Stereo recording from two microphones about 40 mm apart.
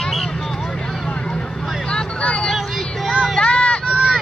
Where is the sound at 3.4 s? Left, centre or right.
Left.